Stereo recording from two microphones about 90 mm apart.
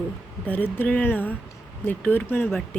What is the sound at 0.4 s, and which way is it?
Speech, 20° left (ahead or behind).